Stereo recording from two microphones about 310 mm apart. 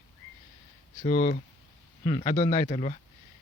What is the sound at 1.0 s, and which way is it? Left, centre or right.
A man's voice, left.